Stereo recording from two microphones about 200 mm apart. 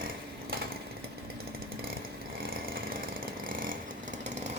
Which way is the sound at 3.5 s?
45° right (ahead or behind).